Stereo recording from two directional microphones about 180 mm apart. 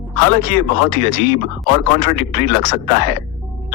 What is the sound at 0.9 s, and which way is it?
Speech, 45° left (ahead or behind).